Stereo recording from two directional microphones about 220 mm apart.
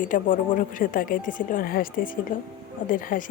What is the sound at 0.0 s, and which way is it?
Speech, 35° left (ahead or behind).